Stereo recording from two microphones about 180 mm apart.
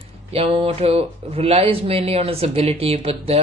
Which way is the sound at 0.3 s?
30° right (ahead or behind).